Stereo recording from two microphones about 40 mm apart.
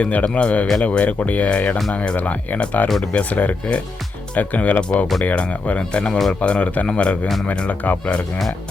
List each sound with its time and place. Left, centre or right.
0.0 s speech: left
4.8 s speech: left
7.7 s speech: left